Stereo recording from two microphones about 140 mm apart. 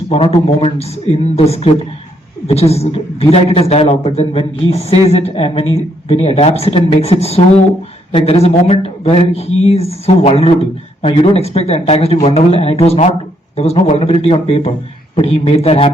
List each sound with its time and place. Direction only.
0.1 s speech: 45° left (ahead or behind)